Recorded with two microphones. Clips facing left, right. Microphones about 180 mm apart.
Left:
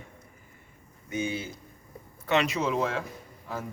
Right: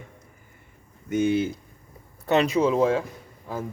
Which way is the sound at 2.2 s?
35° right (ahead or behind).